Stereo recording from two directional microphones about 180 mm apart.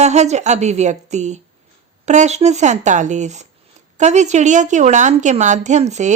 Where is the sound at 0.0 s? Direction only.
40° right (ahead or behind).